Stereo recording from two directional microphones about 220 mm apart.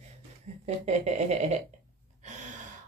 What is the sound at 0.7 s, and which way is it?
Speech, 30° right (ahead or behind).